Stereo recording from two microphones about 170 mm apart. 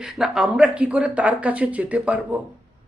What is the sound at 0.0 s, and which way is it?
Speech, 5° right (ahead or behind).